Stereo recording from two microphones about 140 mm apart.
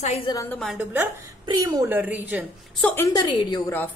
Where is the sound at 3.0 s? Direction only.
30° left (ahead or behind).